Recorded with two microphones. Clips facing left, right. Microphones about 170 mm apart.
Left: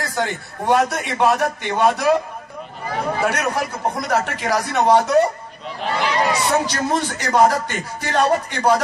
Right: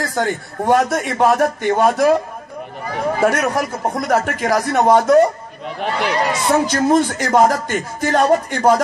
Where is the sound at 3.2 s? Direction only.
50° right (ahead or behind).